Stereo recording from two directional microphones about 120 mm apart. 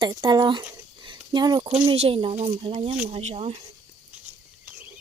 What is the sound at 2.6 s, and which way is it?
Speech, 55° right (ahead or behind).